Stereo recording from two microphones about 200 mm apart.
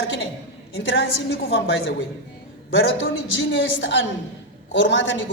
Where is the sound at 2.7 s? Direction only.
70° left (ahead or behind).